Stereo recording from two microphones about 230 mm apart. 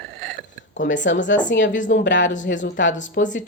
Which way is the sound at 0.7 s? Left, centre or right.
Left.